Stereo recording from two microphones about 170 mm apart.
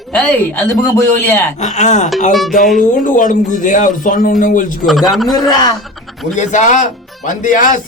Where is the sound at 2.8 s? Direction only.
50° left (ahead or behind).